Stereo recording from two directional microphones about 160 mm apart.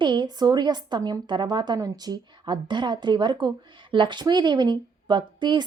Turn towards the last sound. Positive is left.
turn(degrees=-30)  # may be behind; listen again after turning